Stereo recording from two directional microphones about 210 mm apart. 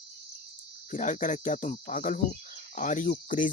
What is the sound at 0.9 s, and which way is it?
Speech, 40° left (ahead or behind).